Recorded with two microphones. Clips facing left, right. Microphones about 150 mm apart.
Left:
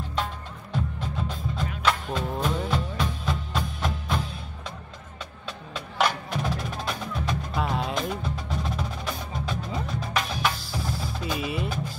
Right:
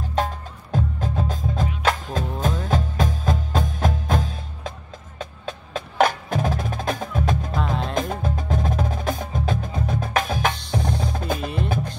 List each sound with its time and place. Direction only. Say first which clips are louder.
0.1 s music: right 8 dB; 45° right (ahead or behind)
5.2 s wood block: right 6 dB; 50° right (ahead or behind)
7.5 s music: right 2 dB; centre (ahead or behind)
7.9 s wood block: right 4 dB; 50° right (ahead or behind)
10.7 s percussion: right 6 dB; 20° right (ahead or behind)
11.1 s music: right 3 dB; 50° right (ahead or behind)